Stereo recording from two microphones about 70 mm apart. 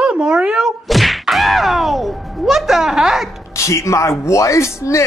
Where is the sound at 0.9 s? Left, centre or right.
Centre.